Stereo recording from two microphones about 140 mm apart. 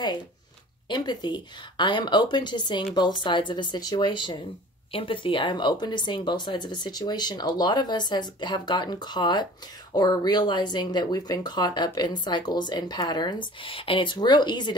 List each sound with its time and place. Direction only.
0.8 s speech: 30° left (ahead or behind)